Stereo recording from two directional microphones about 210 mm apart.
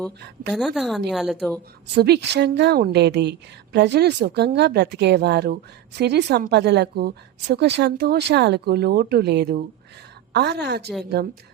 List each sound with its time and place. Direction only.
0.5 s a woman's voice: centre (ahead or behind)
2.0 s a woman's voice: 50° right (ahead or behind)